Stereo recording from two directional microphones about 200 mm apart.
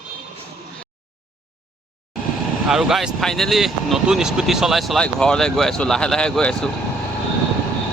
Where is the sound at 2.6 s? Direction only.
Centre (ahead or behind).